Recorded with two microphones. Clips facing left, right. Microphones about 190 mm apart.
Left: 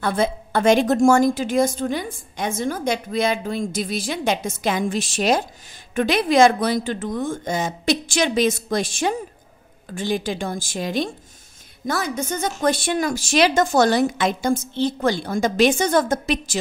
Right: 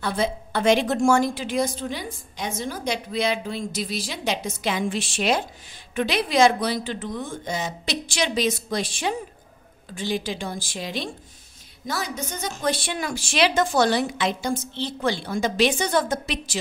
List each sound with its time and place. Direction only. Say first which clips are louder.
0.0 s a woman's voice: left 4 dB; 50° left (ahead or behind)